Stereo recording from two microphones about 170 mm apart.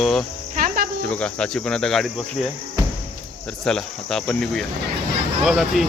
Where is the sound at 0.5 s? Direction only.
55° right (ahead or behind).